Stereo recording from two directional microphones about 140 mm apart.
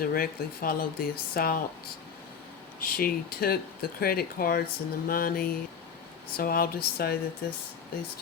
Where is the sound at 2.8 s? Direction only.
90° left.